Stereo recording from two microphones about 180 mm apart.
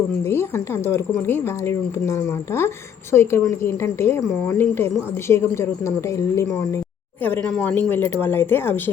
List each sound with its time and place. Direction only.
0.3 s speech: 15° left (ahead or behind)